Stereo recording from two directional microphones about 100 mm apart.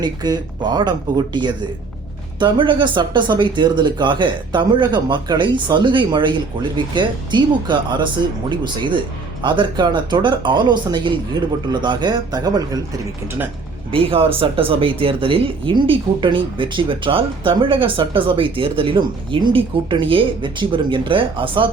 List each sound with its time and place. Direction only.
0.0 s speech: 45° right (ahead or behind)
13.9 s speech: 65° right (ahead or behind)